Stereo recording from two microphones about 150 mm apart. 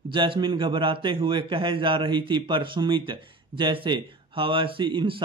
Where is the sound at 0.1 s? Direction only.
30° right (ahead or behind).